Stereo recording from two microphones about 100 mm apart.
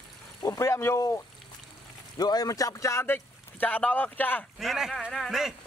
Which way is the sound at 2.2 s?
40° left (ahead or behind).